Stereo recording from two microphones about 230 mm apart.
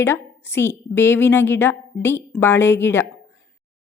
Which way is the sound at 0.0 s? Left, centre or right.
Centre.